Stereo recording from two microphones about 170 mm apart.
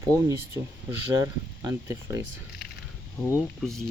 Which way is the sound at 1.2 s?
20° right (ahead or behind).